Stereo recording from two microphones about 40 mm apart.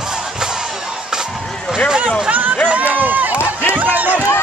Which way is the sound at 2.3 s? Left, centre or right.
Right.